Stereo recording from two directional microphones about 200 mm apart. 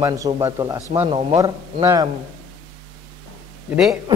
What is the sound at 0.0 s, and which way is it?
Speech, 15° right (ahead or behind).